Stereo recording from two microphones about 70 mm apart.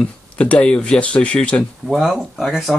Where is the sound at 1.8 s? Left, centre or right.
Centre.